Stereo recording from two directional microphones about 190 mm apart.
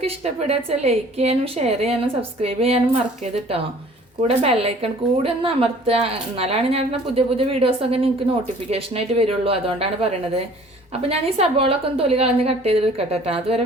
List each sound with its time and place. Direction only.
0.0 s a woman's voice: 35° right (ahead or behind)
4.3 s a woman's voice: 30° right (ahead or behind)